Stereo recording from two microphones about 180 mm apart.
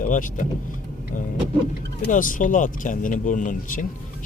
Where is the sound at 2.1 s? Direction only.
50° left (ahead or behind).